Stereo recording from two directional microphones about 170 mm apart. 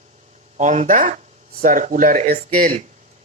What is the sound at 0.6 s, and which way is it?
Speech, 45° right (ahead or behind).